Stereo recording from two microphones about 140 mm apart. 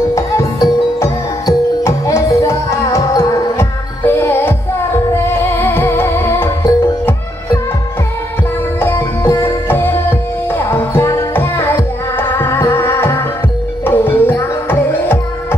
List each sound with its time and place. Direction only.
0.1 s music: 20° left (ahead or behind)
8.7 s music: 15° left (ahead or behind)